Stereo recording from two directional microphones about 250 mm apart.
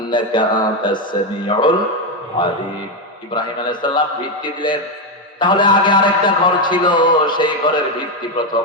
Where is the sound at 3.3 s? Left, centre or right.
Centre.